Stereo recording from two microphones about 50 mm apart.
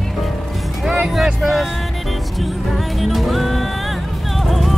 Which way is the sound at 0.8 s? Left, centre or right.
Centre.